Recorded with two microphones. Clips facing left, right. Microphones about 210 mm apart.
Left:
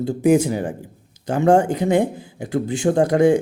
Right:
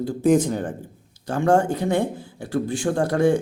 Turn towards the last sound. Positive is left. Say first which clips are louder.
# left 4 dB
turn(degrees=15)  # may be behind; listen again after turning